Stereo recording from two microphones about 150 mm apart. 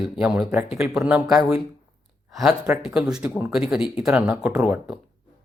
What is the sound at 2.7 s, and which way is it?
Speech, 5° right (ahead or behind).